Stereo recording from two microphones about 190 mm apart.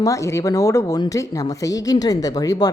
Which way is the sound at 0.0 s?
15° left (ahead or behind).